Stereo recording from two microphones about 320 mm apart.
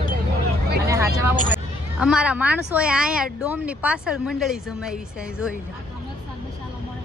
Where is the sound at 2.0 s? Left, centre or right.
Centre.